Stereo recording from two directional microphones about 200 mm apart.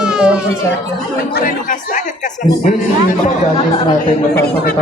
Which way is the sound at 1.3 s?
40° left (ahead or behind).